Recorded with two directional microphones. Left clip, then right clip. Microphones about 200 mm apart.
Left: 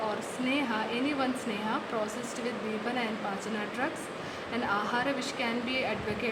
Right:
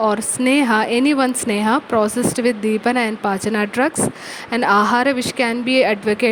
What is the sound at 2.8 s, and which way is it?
A woman's voice, 60° right (ahead or behind).